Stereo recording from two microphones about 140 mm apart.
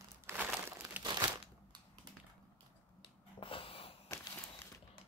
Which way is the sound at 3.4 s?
40° left (ahead or behind).